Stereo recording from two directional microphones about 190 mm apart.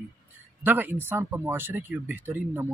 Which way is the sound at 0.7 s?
10° right (ahead or behind).